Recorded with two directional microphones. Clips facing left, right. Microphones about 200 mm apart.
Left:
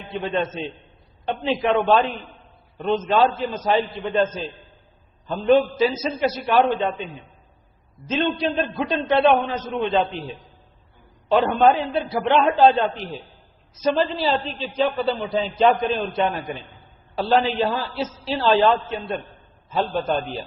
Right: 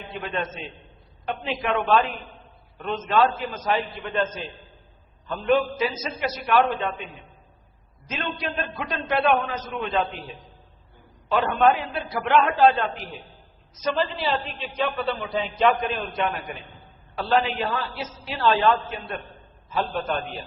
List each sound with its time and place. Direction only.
0.2 s a man's voice: 30° left (ahead or behind)
5.3 s a man's voice: 30° left (ahead or behind)
8.0 s a man's voice: 30° left (ahead or behind)
11.3 s a man's voice: 30° left (ahead or behind)